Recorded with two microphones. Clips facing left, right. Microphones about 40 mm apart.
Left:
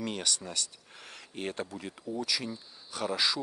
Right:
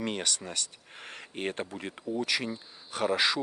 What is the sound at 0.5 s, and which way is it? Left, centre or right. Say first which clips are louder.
Speech: even; right.